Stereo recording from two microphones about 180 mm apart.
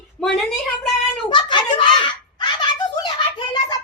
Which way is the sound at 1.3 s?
25° left (ahead or behind).